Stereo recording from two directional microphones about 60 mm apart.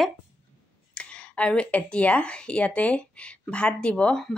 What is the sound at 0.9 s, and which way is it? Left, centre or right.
A woman's voice, centre.